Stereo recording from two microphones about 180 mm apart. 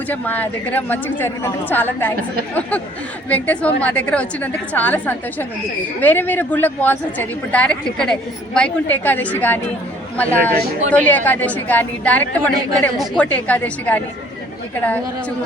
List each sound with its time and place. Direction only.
0.1 s a woman's voice: 10° left (ahead or behind)